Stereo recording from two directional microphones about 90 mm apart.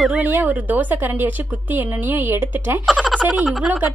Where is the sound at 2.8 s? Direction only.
5° left (ahead or behind).